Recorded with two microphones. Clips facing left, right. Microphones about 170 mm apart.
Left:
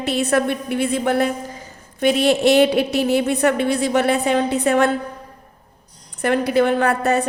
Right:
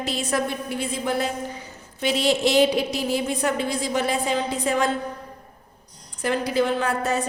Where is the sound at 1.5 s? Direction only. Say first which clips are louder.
Even; 50° left (ahead or behind).